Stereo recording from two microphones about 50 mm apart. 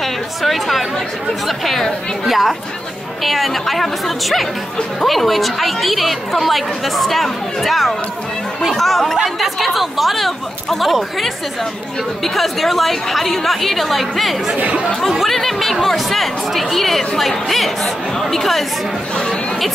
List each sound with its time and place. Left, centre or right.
0.0 s a woman's voice: centre
14.5 s speech: right
15.0 s a woman's voice: centre